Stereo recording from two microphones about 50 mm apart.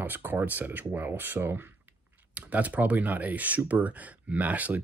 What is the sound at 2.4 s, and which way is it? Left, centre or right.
Speech, right.